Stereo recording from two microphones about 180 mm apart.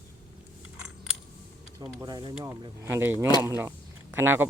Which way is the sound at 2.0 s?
25° right (ahead or behind).